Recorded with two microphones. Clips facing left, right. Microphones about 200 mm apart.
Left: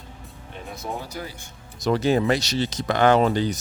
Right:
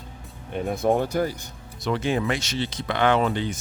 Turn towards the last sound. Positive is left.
turn(degrees=40)  # may be behind; listen again after turning